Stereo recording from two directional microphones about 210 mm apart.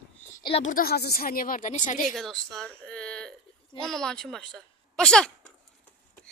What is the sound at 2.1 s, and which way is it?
A woman's voice, centre (ahead or behind).